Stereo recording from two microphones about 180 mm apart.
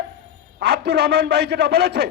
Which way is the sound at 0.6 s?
65° right (ahead or behind).